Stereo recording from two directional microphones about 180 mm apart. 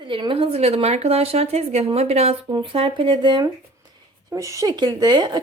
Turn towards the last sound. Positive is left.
turn(degrees=-25)  # may be behind; listen again after turning